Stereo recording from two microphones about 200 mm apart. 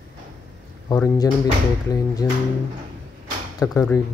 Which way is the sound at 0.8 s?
20° left (ahead or behind).